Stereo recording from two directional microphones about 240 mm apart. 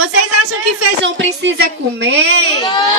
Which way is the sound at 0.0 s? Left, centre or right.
Right.